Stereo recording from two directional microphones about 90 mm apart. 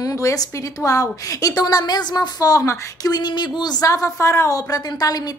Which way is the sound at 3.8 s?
35° left (ahead or behind).